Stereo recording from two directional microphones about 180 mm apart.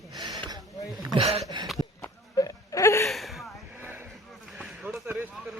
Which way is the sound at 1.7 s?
20° left (ahead or behind).